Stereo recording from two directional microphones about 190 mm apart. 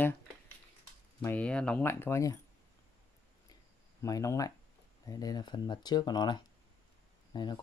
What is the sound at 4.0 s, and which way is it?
Speech, 15° left (ahead or behind).